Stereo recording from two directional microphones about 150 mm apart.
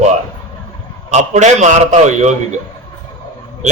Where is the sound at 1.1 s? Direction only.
50° right (ahead or behind).